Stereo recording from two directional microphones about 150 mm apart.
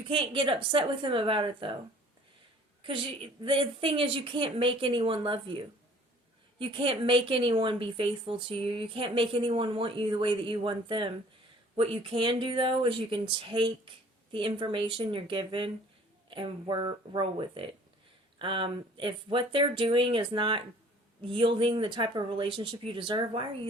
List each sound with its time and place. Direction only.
0.1 s a woman's voice: 35° right (ahead or behind)
3.4 s a woman's voice: 35° right (ahead or behind)
6.6 s a woman's voice: 35° right (ahead or behind)